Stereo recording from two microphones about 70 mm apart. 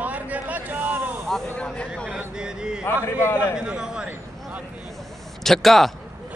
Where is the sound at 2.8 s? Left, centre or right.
Left.